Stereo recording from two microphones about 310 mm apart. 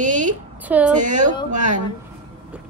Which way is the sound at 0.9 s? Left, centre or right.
Right.